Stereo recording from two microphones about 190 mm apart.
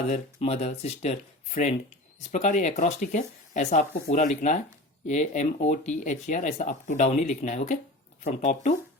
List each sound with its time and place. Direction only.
0.1 s speech: 35° left (ahead or behind)